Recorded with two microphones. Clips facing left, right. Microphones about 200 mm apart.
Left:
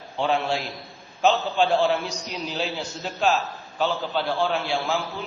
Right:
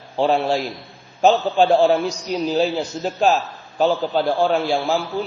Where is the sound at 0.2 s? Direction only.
35° right (ahead or behind).